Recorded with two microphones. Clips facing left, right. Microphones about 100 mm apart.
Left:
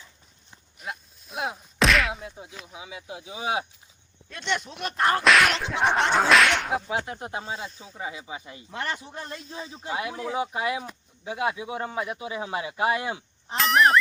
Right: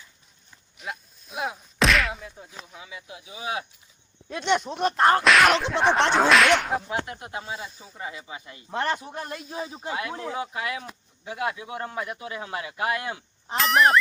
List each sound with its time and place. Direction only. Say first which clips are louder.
0.8 s a sound: right 1 dB; centre (ahead or behind)
2.3 s speech: left 1 dB; 15° left (ahead or behind)
3.1 s speech: left 3 dB; 30° left (ahead or behind)
4.9 s whip: right 3 dB; 25° right (ahead or behind)
5.2 s speech: right 2 dB; centre (ahead or behind)
6.9 s speech: left 1 dB; 25° left (ahead or behind)
7.9 s speech: left 1 dB; 10° left (ahead or behind)
8.7 s a man's voice: right 5 dB; 20° right (ahead or behind)
9.9 s speech: left 3 dB; 15° left (ahead or behind)
13.6 s speech: even; centre (ahead or behind)